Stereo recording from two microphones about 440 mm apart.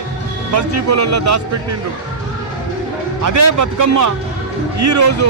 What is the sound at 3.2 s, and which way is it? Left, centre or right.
A man's voice, right.